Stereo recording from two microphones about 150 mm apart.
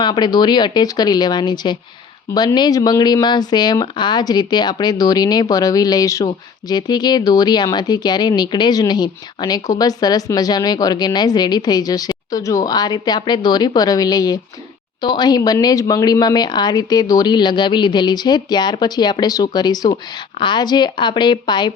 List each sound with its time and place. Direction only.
0.0 s a woman's voice: 30° left (ahead or behind)